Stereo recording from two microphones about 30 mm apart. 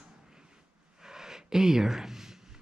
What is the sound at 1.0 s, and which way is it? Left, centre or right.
Gasp, centre.